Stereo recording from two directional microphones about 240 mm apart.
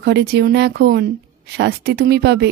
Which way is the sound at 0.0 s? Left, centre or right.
Right.